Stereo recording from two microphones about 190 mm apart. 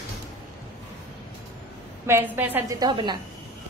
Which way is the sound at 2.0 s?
10° right (ahead or behind).